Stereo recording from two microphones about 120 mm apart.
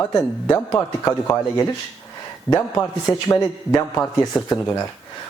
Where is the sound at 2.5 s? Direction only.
20° left (ahead or behind).